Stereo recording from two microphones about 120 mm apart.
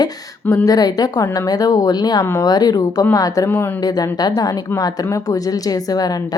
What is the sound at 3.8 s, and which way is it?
Speech, 30° left (ahead or behind).